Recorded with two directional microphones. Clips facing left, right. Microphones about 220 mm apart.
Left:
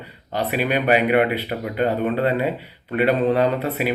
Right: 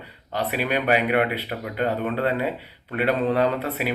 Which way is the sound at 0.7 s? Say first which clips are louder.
Left 3 dB; 5° left (ahead or behind).